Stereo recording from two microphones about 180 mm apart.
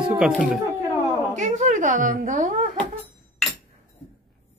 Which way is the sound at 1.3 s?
45° right (ahead or behind).